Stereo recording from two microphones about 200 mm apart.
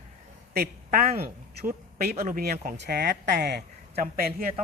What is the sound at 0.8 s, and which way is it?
A woman's voice, 40° right (ahead or behind).